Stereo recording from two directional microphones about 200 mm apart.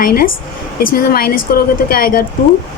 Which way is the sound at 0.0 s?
45° left (ahead or behind).